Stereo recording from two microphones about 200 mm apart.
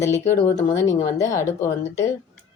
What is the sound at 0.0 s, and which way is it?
Speech, 15° left (ahead or behind).